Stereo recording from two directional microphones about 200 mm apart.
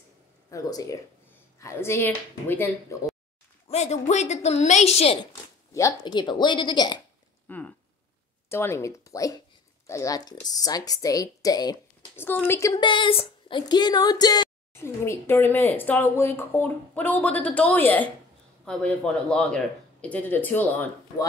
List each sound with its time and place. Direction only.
0.5 s a woman's voice: 15° left (ahead or behind)
3.6 s a woman's voice: 35° left (ahead or behind)
5.7 s speech: 15° left (ahead or behind)
7.4 s a sound: 10° left (ahead or behind)
8.5 s a woman's voice: 10° left (ahead or behind)